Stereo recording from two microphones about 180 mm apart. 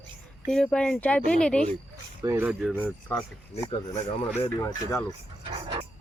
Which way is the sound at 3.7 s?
25° left (ahead or behind).